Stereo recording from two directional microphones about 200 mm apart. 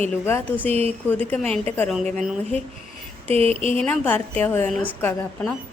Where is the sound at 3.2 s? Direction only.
30° right (ahead or behind).